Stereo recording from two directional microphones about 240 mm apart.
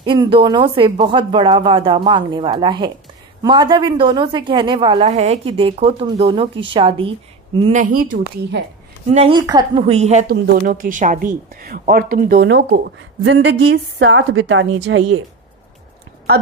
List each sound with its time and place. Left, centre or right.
0.0 s a woman's voice: right
7.8 s speech: right
9.1 s a woman's voice: right
10.3 s a woman's voice: right